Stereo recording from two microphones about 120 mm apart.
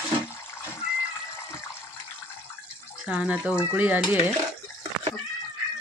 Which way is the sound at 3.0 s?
10° right (ahead or behind).